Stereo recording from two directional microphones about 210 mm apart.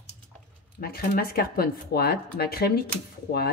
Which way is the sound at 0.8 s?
45° left (ahead or behind).